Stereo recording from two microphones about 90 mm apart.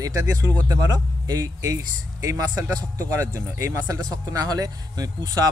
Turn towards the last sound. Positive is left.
turn(degrees=-45)  # may be behind; listen again after turning